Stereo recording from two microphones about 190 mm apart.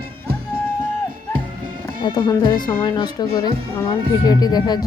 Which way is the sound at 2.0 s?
20° left (ahead or behind).